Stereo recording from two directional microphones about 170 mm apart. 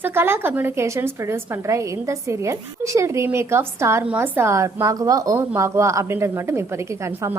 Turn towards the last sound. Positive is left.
turn(degrees=-15)  # may be behind; listen again after turning